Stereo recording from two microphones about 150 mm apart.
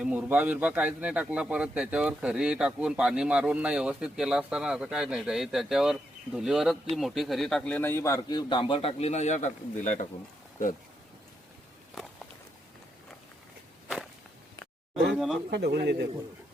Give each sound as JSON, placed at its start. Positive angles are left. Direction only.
{"t": 0.0, "sound": "a man's voice", "side_deg": -10}
{"t": 8.4, "sound": "a man's voice", "side_deg": 30}
{"t": 13.8, "sound": "walk", "side_deg": 0}
{"t": 15.4, "sound": "speech", "side_deg": -90}